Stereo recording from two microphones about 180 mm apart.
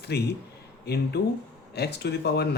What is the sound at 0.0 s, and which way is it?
Speech, 65° left (ahead or behind).